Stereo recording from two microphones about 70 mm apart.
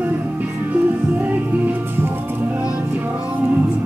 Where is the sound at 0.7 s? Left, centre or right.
Right.